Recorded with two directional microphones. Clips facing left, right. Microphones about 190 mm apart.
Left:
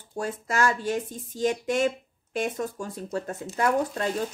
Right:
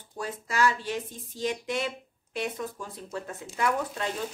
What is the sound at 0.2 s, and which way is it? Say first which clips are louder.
Speech: left 1 dB; 45° left (ahead or behind).